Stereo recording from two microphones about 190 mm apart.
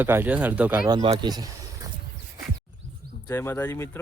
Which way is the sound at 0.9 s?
20° right (ahead or behind).